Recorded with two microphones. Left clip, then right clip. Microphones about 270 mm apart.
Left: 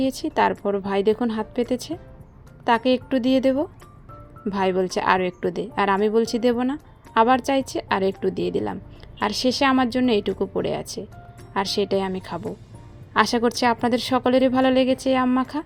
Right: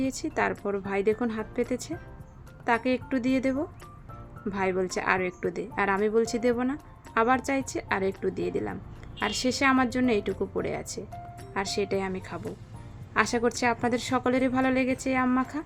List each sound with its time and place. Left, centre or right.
0.0 s a woman's voice: centre